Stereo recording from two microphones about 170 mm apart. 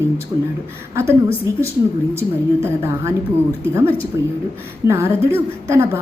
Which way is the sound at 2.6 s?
15° right (ahead or behind).